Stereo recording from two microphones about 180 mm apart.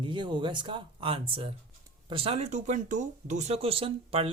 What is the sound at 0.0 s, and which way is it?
Speech, 25° right (ahead or behind).